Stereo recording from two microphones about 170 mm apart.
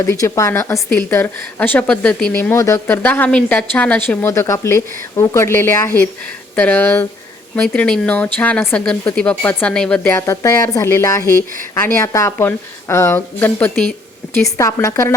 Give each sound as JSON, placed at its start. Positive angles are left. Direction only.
{"t": 0.0, "sound": "a woman's voice", "side_deg": 15}